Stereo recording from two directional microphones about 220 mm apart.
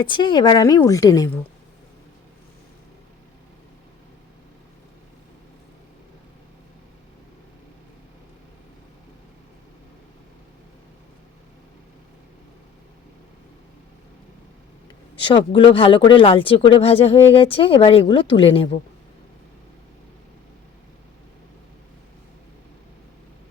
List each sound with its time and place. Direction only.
0.0 s a woman's voice: 20° left (ahead or behind)
15.2 s speech: 25° left (ahead or behind)